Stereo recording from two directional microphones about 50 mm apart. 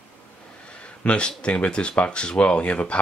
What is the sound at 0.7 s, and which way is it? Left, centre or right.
Speech, left.